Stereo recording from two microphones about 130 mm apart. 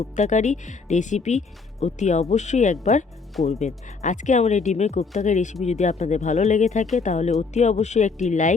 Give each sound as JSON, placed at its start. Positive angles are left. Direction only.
{"t": 0.2, "sound": "speech", "side_deg": 70}